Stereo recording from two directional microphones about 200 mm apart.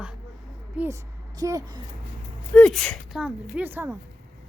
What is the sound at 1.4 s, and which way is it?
Speech, 15° right (ahead or behind).